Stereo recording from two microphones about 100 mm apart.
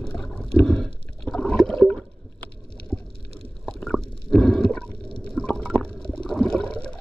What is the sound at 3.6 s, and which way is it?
Stomach rumble, 5° left (ahead or behind).